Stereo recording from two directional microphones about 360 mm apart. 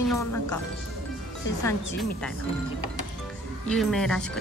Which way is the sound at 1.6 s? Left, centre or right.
Centre.